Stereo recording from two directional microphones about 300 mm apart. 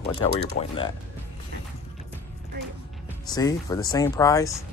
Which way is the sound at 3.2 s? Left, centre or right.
Centre.